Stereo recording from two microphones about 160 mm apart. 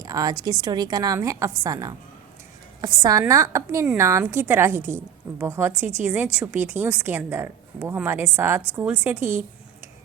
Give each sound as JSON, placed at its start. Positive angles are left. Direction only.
{"t": 0.0, "sound": "a woman's voice", "side_deg": -20}